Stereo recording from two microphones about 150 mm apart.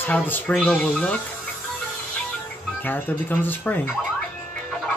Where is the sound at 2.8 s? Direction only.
15° left (ahead or behind).